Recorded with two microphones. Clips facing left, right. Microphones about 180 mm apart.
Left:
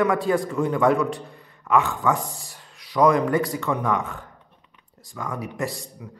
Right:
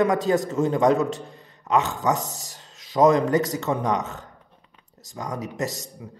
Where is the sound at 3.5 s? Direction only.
20° right (ahead or behind).